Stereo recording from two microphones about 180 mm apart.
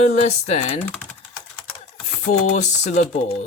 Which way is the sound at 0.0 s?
40° left (ahead or behind).